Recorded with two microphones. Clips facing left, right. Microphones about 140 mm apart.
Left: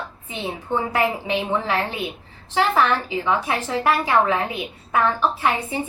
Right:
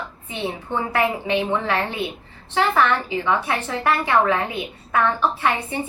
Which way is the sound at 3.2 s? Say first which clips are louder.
Even; 20° left (ahead or behind).